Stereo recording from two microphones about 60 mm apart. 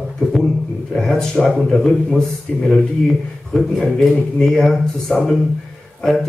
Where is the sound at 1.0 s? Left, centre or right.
Centre.